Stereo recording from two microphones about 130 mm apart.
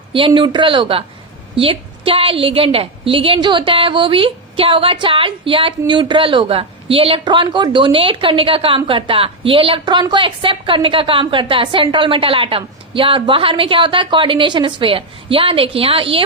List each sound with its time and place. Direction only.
0.1 s a woman's voice: 40° right (ahead or behind)